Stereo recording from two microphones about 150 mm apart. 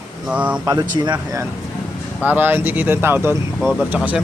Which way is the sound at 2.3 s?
10° right (ahead or behind).